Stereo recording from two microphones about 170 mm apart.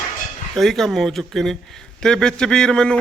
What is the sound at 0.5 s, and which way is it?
Speech, centre (ahead or behind).